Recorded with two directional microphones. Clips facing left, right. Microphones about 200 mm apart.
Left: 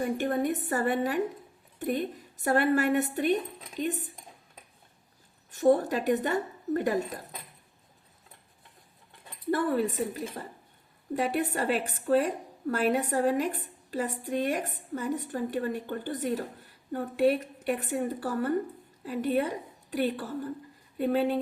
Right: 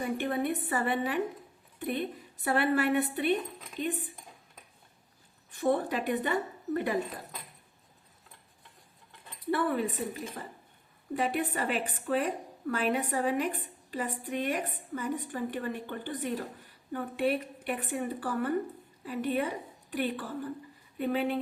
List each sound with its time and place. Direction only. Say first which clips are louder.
0.0 s a woman's voice: left 3 dB; 45° left (ahead or behind)
5.5 s a woman's voice: left 5 dB; 45° left (ahead or behind)
9.5 s a woman's voice: left 2 dB; 45° left (ahead or behind)